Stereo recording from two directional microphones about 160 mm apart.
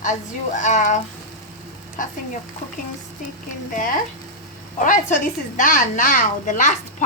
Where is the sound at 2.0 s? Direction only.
55° left (ahead or behind).